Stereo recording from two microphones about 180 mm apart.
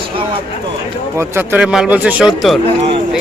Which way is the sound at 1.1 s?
15° right (ahead or behind).